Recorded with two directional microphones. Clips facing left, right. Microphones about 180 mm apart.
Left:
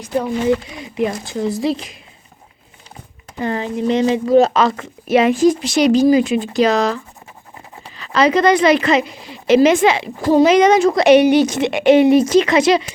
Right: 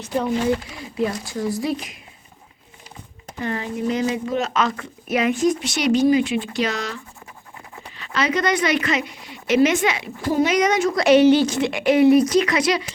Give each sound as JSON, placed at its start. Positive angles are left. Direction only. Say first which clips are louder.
{"t": 0.0, "sound": "a woman's voice", "louder": "left 3 dB", "side_deg": 15}
{"t": 3.4, "sound": "a woman's voice", "louder": "left 5 dB", "side_deg": 30}
{"t": 7.9, "sound": "a woman's voice", "louder": "left 8 dB", "side_deg": 35}